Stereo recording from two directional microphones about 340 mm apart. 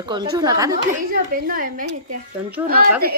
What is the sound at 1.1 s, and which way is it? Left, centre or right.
Speech, right.